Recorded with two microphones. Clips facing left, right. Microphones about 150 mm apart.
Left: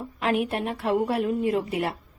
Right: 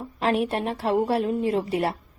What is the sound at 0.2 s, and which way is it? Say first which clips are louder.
A woman's voice: right 2 dB; 30° right (ahead or behind).